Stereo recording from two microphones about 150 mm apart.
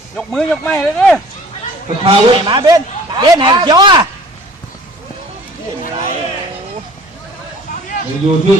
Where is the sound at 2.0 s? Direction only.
30° right (ahead or behind).